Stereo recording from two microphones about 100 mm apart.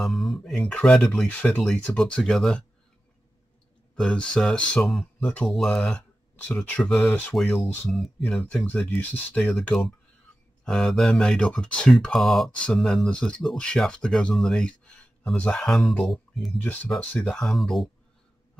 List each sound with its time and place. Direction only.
0.0 s speech: centre (ahead or behind)
3.9 s speech: 10° left (ahead or behind)
7.5 s speech: 15° left (ahead or behind)
7.9 s speech: 5° left (ahead or behind)
9.4 s speech: centre (ahead or behind)
12.4 s speech: 10° left (ahead or behind)